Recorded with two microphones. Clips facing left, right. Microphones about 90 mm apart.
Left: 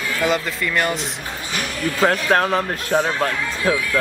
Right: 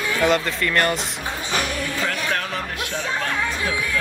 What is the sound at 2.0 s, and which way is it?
Speech, 40° left (ahead or behind).